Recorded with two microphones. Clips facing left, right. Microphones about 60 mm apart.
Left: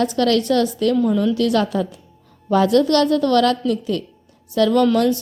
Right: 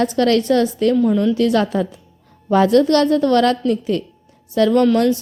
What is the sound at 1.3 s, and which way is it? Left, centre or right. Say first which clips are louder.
A woman's voice: right 2 dB; right.